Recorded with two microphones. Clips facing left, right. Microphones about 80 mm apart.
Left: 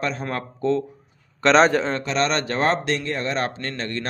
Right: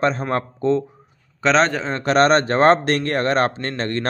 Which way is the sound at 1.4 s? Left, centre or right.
Centre.